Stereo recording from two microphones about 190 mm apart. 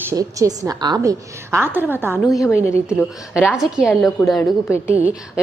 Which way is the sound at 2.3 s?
15° left (ahead or behind).